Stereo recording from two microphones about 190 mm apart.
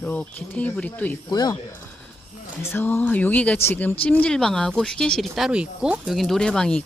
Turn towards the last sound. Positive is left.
turn(degrees=5)  # may be behind; listen again after turning